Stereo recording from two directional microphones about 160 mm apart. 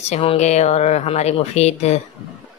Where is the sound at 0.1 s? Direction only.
40° left (ahead or behind).